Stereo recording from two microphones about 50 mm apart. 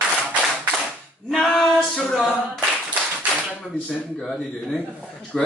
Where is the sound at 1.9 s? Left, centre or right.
Centre.